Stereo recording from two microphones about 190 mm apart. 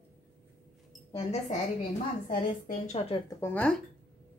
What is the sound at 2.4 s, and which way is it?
Speech, 30° left (ahead or behind).